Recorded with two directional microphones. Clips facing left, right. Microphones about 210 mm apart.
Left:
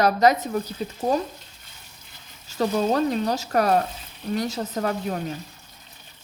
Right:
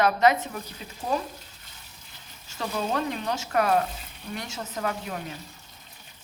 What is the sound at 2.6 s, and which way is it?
A woman's voice, 40° left (ahead or behind).